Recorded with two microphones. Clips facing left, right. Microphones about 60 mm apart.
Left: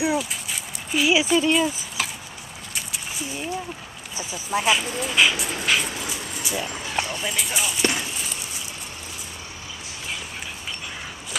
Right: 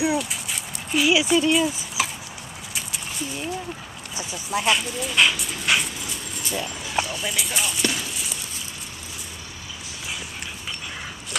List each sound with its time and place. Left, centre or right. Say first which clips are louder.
0.0 s dog: even; centre
2.7 s a sound: even; centre
4.2 s speech: left 1 dB; centre
5.7 s dog: right 1 dB; centre
7.2 s speech: even; centre
7.8 s clip-clop: left 5 dB; left